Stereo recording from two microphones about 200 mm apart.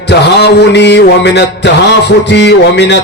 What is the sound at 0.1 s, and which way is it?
Music, 55° left (ahead or behind).